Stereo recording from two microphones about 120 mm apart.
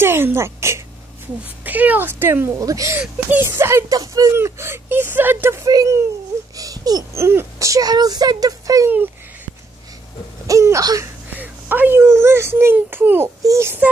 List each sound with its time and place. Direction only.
0.0 s speech: 20° right (ahead or behind)
3.0 s speech: 15° right (ahead or behind)
10.4 s speech: 25° right (ahead or behind)
11.3 s speech: 15° right (ahead or behind)